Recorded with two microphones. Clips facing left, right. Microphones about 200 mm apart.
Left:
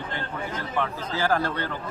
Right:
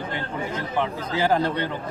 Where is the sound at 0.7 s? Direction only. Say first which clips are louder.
Right 3 dB; 20° right (ahead or behind).